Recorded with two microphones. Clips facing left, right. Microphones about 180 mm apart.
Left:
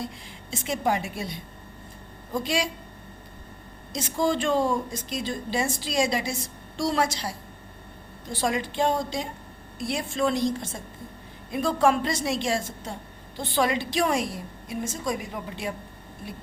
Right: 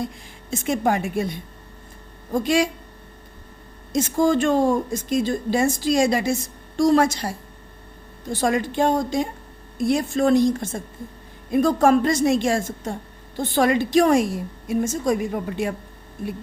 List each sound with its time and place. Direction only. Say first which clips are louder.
0.5 s a woman's voice: right 5 dB; 50° right (ahead or behind)
3.9 s a woman's voice: right 7 dB; 50° right (ahead or behind)